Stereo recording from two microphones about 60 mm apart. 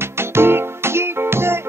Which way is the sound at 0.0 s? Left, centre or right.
Right.